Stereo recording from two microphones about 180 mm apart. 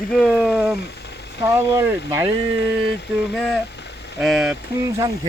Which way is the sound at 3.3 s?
5° left (ahead or behind).